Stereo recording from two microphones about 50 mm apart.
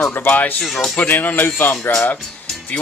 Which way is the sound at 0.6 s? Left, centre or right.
Centre.